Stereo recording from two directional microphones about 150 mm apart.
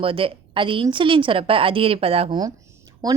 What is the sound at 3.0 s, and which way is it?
Speech, 25° right (ahead or behind).